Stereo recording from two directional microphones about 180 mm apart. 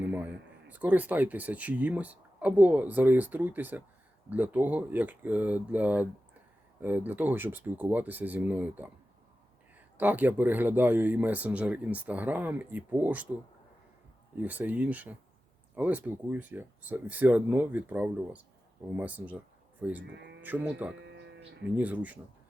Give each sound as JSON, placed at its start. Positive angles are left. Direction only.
{"t": 0.0, "sound": "speech", "side_deg": -10}
{"t": 10.0, "sound": "speech", "side_deg": -10}
{"t": 14.3, "sound": "speech", "side_deg": -10}
{"t": 20.1, "sound": "speech", "side_deg": -75}
{"t": 20.4, "sound": "speech", "side_deg": -10}
{"t": 21.0, "sound": "a sound", "side_deg": -75}
{"t": 21.8, "sound": "speech", "side_deg": -10}